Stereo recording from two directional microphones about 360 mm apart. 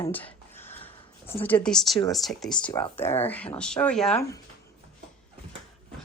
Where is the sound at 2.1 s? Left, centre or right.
Centre.